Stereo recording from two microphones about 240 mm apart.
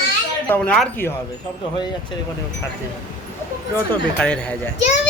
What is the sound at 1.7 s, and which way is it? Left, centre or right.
Speech, centre.